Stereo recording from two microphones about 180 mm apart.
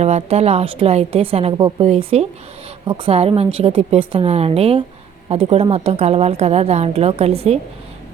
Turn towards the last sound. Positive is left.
turn(degrees=-35)  # may be behind; listen again after turning